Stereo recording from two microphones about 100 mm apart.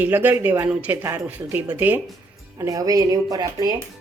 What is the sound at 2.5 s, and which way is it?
Speech, 35° right (ahead or behind).